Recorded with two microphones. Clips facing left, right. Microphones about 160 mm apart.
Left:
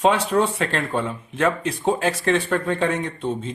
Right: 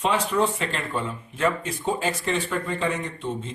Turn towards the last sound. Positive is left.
turn(degrees=60)  # may be behind; listen again after turning